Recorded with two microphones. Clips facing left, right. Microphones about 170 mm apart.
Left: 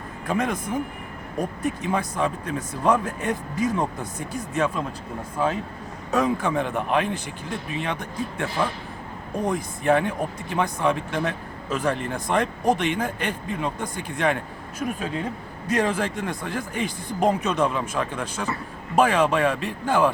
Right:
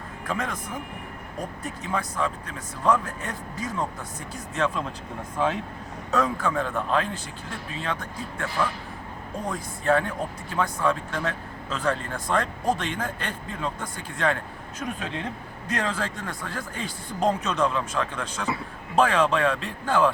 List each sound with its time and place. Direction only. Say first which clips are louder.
0.3 s speech: left 5 dB; 15° left (ahead or behind)
1.6 s speech: left 4 dB; 15° left (ahead or behind)